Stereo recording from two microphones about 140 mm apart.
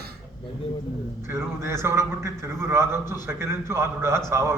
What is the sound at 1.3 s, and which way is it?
A man's voice, 20° right (ahead or behind).